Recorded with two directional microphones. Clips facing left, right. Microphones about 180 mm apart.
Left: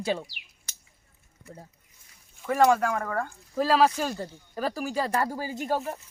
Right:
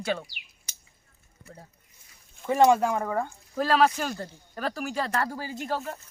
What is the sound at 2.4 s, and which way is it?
Speech, 20° right (ahead or behind).